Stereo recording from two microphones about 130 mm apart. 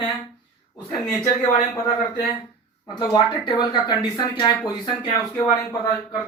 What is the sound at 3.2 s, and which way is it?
Speech, 40° left (ahead or behind).